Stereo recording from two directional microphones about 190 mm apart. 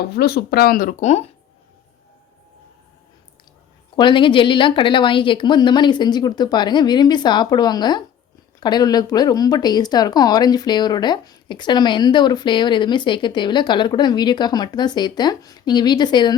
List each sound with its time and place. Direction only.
0.2 s speech: 55° left (ahead or behind); by 1.2 s 40° left (ahead or behind)
3.9 s speech: 25° left (ahead or behind)